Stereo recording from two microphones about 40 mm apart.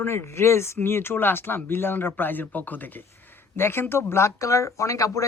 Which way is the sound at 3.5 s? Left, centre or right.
Left.